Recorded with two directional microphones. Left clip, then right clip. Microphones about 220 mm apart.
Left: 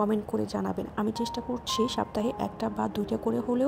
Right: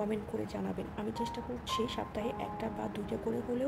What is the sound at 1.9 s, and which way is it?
A woman's voice, 40° left (ahead or behind).